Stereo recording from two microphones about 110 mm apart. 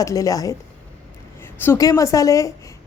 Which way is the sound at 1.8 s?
30° left (ahead or behind).